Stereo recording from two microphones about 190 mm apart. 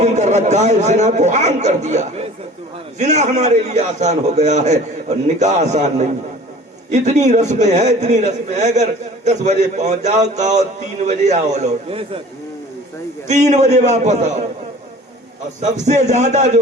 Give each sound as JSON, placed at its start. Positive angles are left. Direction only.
{"t": 0.0, "sound": "a man's voice", "side_deg": -35}
{"t": 13.2, "sound": "a man's voice", "side_deg": -35}
{"t": 15.6, "sound": "a man's voice", "side_deg": -35}